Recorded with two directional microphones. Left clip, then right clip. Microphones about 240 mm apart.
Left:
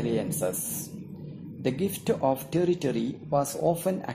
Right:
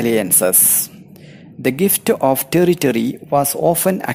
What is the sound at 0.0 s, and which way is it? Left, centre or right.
Speech, right.